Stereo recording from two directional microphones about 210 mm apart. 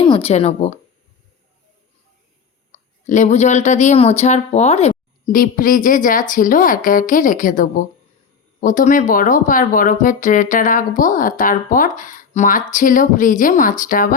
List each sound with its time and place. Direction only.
0.0 s speech: 25° left (ahead or behind)
2.7 s speech: 35° left (ahead or behind)